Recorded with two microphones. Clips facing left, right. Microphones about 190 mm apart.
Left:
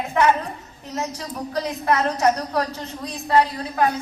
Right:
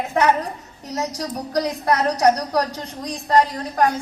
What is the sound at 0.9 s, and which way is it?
A woman's voice, 40° right (ahead or behind).